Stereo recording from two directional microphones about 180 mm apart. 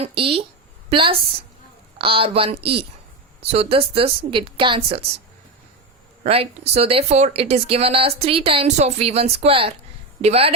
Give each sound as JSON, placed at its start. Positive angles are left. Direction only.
{"t": 0.0, "sound": "a woman's voice", "side_deg": -30}
{"t": 6.2, "sound": "speech", "side_deg": -35}